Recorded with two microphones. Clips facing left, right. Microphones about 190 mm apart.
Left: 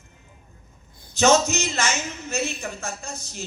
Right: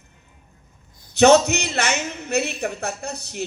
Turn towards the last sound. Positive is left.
turn(degrees=-65)  # may be behind; listen again after turning